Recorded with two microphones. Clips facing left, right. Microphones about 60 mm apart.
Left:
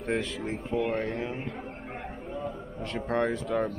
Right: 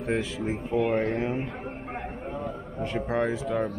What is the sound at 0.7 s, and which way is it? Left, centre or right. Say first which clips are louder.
Speech: right 4 dB; centre.